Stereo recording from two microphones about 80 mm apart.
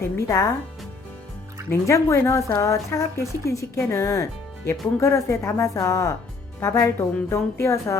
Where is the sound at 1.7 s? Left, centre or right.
Left.